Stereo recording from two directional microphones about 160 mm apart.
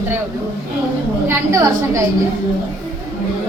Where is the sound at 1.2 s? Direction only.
15° right (ahead or behind).